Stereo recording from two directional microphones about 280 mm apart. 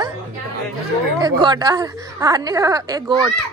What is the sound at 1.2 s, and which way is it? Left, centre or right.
Speech, centre.